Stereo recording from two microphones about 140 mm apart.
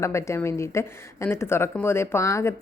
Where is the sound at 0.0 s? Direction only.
20° left (ahead or behind).